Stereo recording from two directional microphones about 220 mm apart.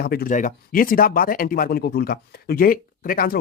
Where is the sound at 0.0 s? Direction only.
45° left (ahead or behind).